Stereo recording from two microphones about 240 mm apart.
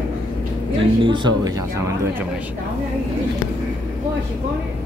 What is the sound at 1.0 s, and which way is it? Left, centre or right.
Speech, centre.